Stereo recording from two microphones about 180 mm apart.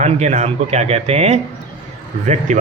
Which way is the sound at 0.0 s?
40° right (ahead or behind).